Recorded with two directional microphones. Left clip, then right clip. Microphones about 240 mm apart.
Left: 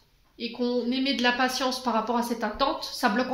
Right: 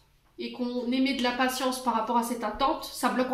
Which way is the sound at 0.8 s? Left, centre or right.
Left.